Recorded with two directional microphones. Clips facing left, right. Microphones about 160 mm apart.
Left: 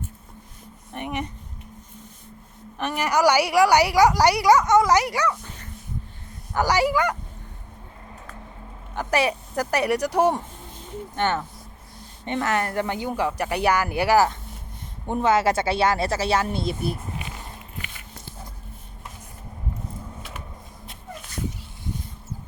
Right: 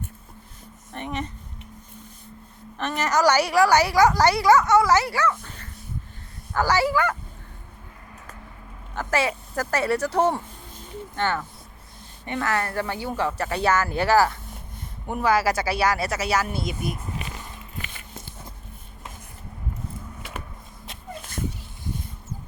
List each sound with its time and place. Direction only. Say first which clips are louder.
0.9 s a sound: left 1 dB; 15° left (ahead or behind)
2.7 s a woman's voice: even; 10° left (ahead or behind)
9.0 s a woman's voice: left 2 dB; 15° left (ahead or behind); by 17.0 s 30° left (ahead or behind)